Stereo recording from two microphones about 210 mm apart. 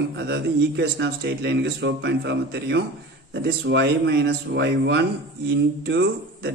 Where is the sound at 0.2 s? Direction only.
50° right (ahead or behind).